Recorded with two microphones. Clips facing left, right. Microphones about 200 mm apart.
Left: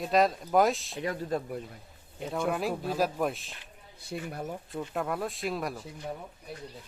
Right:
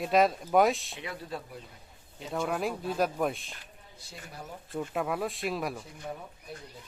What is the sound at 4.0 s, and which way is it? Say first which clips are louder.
Speech: left 11 dB; 55° left (ahead or behind).